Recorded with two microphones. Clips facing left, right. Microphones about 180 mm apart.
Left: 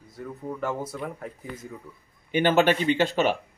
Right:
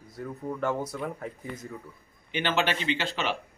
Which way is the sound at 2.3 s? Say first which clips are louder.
Left 7 dB; 45° left (ahead or behind).